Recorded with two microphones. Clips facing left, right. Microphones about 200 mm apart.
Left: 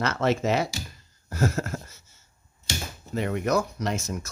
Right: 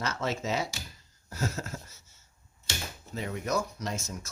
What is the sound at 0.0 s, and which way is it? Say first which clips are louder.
Speech: left 8 dB; 65° left (ahead or behind).